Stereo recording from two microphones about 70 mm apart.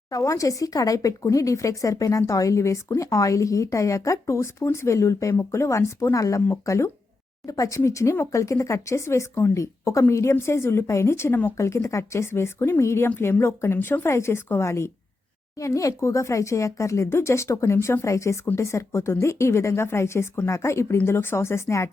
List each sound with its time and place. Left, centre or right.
0.1 s a woman's voice: left